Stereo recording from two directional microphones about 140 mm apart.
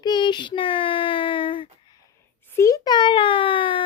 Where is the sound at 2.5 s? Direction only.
25° left (ahead or behind).